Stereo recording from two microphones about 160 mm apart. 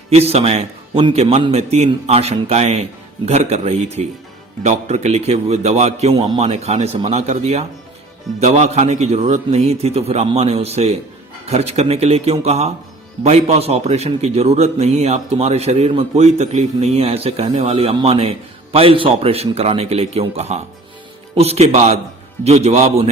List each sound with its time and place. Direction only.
0.1 s a man's voice: 40° right (ahead or behind)
6.1 s a man's voice: 25° right (ahead or behind)
6.4 s a man's voice: 40° right (ahead or behind)